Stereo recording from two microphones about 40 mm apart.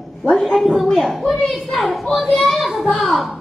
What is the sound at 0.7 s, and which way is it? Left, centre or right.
A child's voice, centre.